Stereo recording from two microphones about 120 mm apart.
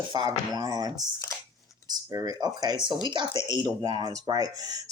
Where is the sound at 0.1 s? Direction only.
35° right (ahead or behind).